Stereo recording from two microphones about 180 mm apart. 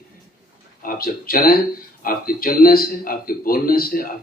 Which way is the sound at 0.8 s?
55° left (ahead or behind).